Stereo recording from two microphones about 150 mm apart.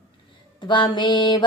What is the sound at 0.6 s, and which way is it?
Speech, 30° left (ahead or behind).